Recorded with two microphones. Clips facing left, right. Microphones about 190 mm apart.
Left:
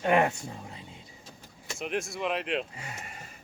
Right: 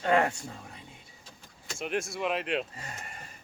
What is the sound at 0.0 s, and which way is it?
Speech, 20° left (ahead or behind).